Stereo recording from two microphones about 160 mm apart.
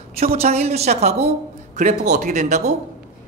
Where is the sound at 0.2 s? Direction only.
40° right (ahead or behind).